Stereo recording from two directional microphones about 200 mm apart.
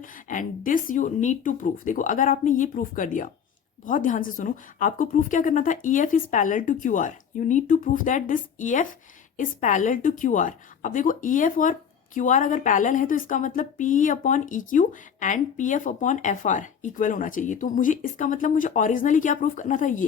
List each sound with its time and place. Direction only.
0.0 s a woman's voice: 40° left (ahead or behind)